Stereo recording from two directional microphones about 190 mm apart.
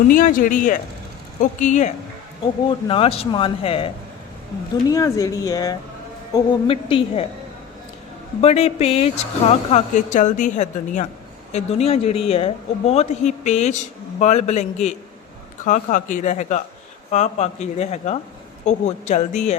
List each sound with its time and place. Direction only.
0.1 s speech: 45° left (ahead or behind)
2.6 s speech: 25° left (ahead or behind)
4.9 s speech: 15° left (ahead or behind)
8.4 s speech: 35° left (ahead or behind)